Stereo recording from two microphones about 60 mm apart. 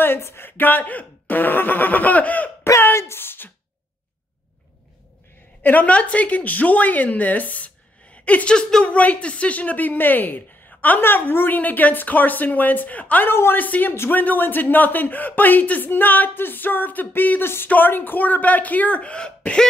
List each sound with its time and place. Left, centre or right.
0.0 s speech: left
3.0 s speech: left
5.6 s a woman's voice: left
8.5 s a woman's voice: centre
8.8 s a woman's voice: left
13.3 s speech: left
13.6 s a woman's voice: left
13.9 s speech: left
14.2 s a woman's voice: left; by 19.7 s centre